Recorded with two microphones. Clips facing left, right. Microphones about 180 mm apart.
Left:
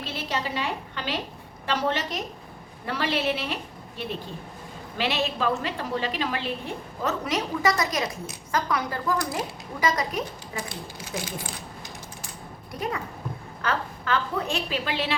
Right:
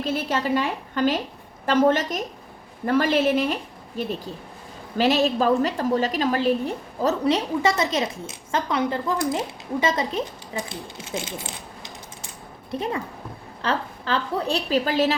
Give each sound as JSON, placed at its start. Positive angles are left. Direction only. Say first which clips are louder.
{"t": 0.0, "sound": "a woman's voice", "louder": "right 6 dB", "side_deg": -50}
{"t": 12.7, "sound": "a woman's voice", "louder": "right 4 dB", "side_deg": -25}